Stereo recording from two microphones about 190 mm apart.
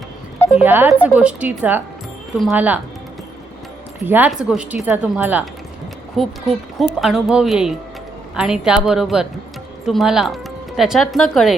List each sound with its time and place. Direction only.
0.5 s speech: 10° right (ahead or behind)
4.0 s speech: 10° right (ahead or behind)